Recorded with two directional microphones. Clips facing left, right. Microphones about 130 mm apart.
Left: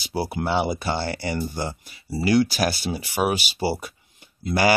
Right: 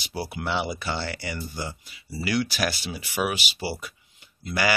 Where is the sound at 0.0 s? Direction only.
30° left (ahead or behind).